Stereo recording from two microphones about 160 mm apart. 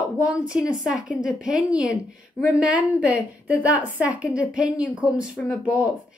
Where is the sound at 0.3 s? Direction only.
5° right (ahead or behind).